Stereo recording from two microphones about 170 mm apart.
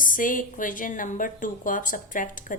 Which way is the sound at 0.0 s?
50° left (ahead or behind).